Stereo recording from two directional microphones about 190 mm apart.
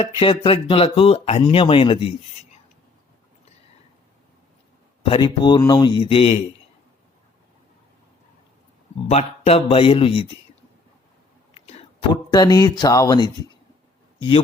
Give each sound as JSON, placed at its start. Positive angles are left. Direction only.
{"t": 0.2, "sound": "speech", "side_deg": 30}
{"t": 5.0, "sound": "speech", "side_deg": 25}
{"t": 9.0, "sound": "a man's voice", "side_deg": 35}